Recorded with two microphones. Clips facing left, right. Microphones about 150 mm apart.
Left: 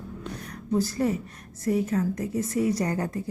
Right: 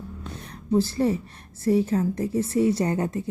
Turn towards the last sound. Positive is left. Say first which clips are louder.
# right 3 dB
turn(degrees=-25)  # may be behind; listen again after turning